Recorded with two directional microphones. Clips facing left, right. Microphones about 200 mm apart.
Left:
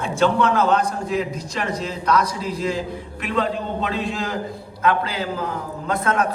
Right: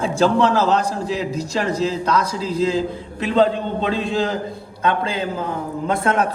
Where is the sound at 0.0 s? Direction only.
30° right (ahead or behind).